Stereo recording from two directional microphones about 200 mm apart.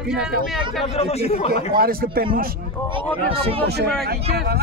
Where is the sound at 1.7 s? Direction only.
50° right (ahead or behind).